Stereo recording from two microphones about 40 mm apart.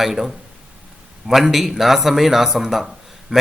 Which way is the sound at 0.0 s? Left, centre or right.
Centre.